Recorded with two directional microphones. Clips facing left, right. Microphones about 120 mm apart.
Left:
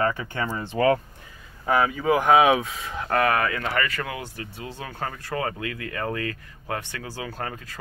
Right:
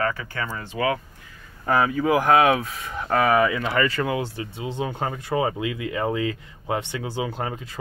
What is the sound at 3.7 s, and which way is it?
Speech, 25° right (ahead or behind).